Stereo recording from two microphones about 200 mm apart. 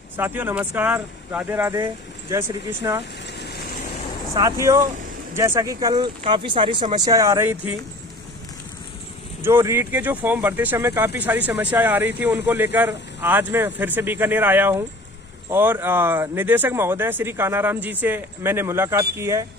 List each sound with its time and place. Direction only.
0.2 s speech: 10° right (ahead or behind)
3.3 s vehicle: 55° left (ahead or behind)
4.4 s speech: 15° right (ahead or behind)
9.4 s speech: 10° right (ahead or behind)